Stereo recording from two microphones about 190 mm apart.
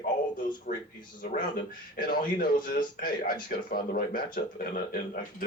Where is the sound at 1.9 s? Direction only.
50° left (ahead or behind).